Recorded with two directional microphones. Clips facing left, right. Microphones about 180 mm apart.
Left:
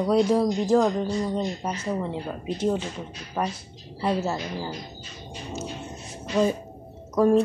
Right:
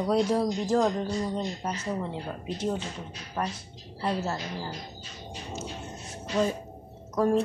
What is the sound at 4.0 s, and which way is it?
Speech, 10° left (ahead or behind).